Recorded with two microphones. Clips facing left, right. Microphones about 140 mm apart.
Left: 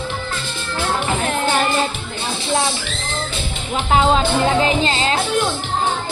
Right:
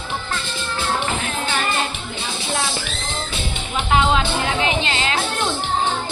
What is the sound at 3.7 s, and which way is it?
Speech, 35° left (ahead or behind).